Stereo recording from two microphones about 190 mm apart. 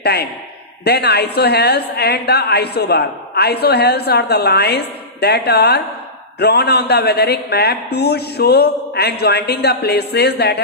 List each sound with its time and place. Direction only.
0.0 s a man's voice: 60° left (ahead or behind)